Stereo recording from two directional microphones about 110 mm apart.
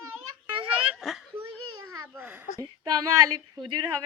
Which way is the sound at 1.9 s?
30° right (ahead or behind).